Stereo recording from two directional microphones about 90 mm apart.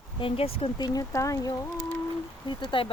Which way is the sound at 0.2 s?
85° left.